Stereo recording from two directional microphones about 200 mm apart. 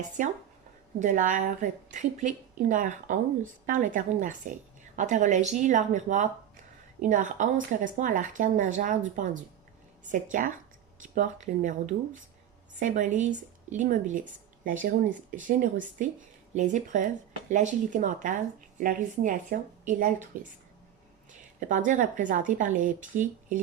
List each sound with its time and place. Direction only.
0.2 s a woman's voice: 40° right (ahead or behind)
21.6 s a woman's voice: 40° right (ahead or behind)